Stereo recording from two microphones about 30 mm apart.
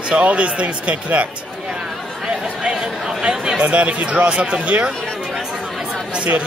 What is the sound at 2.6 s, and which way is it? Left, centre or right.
Chatter, right.